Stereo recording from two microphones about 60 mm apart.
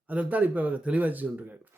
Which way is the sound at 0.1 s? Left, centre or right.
Right.